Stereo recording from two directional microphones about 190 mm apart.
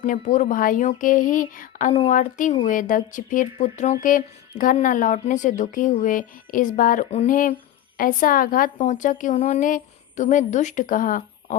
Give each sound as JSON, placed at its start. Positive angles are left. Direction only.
{"t": 0.0, "sound": "speech", "side_deg": 40}